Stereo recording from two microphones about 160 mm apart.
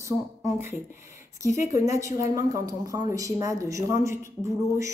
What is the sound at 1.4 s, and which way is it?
Speech, 20° right (ahead or behind).